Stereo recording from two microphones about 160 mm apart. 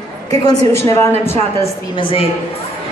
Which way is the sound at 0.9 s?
15° left (ahead or behind).